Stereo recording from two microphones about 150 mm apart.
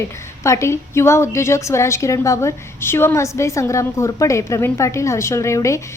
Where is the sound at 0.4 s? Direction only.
20° left (ahead or behind).